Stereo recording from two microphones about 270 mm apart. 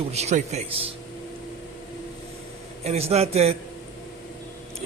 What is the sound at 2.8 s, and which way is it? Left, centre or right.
Speech, right.